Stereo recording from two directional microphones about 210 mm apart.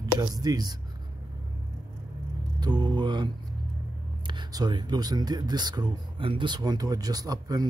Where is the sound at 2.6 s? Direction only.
20° right (ahead or behind).